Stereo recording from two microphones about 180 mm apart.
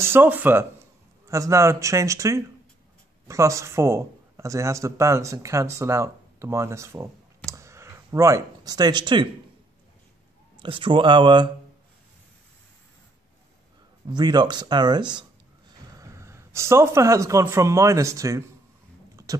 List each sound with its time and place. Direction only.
0.0 s speech: 10° right (ahead or behind)
10.6 s speech: 25° right (ahead or behind)
14.0 s speech: 25° right (ahead or behind)